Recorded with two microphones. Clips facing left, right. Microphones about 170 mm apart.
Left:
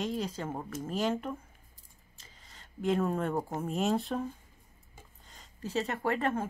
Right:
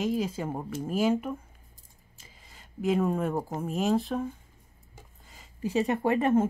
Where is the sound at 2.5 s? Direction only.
5° right (ahead or behind).